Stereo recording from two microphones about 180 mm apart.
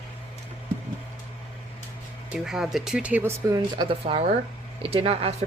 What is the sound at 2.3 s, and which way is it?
Speech, 5° right (ahead or behind).